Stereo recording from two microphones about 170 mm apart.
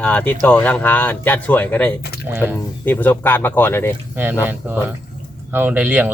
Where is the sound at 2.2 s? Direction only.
15° right (ahead or behind).